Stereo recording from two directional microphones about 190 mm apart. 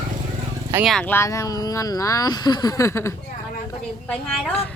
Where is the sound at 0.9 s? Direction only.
5° left (ahead or behind).